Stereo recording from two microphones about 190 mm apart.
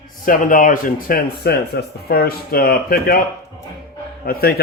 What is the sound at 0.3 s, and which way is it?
Speech, 45° left (ahead or behind).